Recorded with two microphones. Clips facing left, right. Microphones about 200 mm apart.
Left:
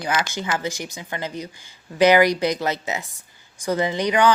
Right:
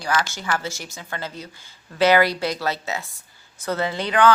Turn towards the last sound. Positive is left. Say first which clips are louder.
# even
turn(degrees=15)  # may be behind; listen again after turning